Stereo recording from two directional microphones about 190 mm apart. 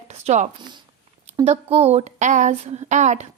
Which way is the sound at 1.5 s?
30° right (ahead or behind).